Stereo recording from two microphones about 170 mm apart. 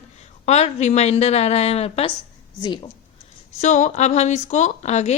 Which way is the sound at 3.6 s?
45° left (ahead or behind).